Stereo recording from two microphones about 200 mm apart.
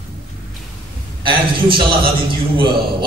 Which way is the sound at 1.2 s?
25° right (ahead or behind).